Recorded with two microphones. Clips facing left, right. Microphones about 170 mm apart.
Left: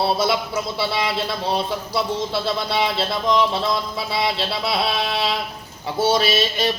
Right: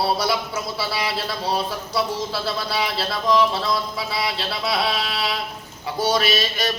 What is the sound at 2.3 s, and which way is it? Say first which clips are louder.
Mantra: left 3 dB; 25° left (ahead or behind).